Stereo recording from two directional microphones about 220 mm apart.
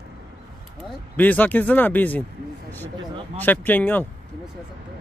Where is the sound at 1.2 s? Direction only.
5° left (ahead or behind).